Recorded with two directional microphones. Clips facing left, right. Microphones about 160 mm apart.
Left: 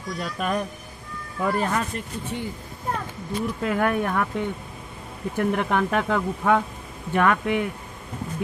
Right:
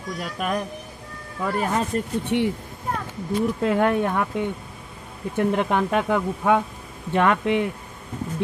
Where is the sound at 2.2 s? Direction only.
75° right (ahead or behind).